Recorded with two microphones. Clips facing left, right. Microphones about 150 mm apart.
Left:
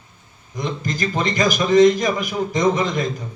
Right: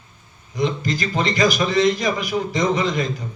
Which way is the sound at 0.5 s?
45° left (ahead or behind).